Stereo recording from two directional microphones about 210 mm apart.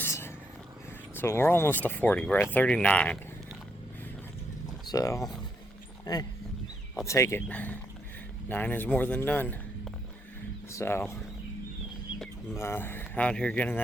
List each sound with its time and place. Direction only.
0.0 s whispering: 10° left (ahead or behind)
1.1 s speech: 10° left (ahead or behind)
4.9 s speech: 15° left (ahead or behind)
10.7 s speech: 10° left (ahead or behind)
12.5 s speech: 10° left (ahead or behind)